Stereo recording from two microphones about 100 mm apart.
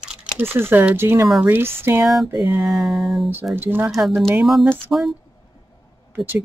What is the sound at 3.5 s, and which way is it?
Speech, 20° right (ahead or behind).